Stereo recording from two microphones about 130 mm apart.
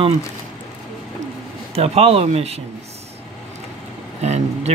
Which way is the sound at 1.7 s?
55° right (ahead or behind).